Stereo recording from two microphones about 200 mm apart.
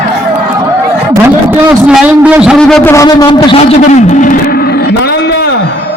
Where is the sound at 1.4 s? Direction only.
5° right (ahead or behind).